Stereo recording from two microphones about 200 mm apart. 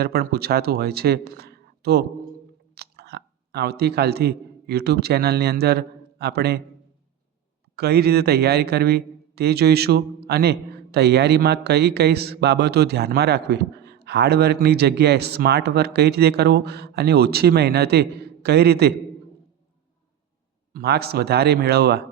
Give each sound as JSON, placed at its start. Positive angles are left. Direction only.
{"t": 0.0, "sound": "a man's voice", "side_deg": -50}
{"t": 7.8, "sound": "a man's voice", "side_deg": -55}
{"t": 20.7, "sound": "a man's voice", "side_deg": -55}